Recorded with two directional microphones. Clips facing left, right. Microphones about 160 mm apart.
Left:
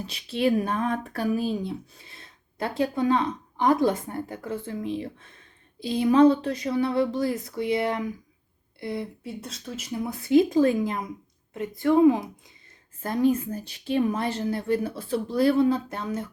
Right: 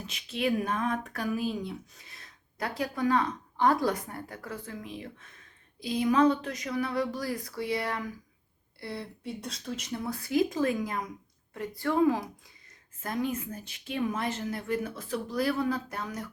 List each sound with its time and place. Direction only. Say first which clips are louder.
0.0 s speech: left 6 dB; 35° left (ahead or behind)
9.2 s speech: left 1 dB; centre (ahead or behind)
10.0 s speech: left 8 dB; 20° left (ahead or behind)
13.0 s a woman's voice: left 9 dB; 35° left (ahead or behind)